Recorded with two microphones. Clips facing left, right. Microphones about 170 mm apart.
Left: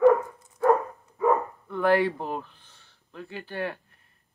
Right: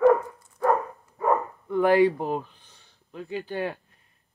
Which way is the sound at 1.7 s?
15° right (ahead or behind).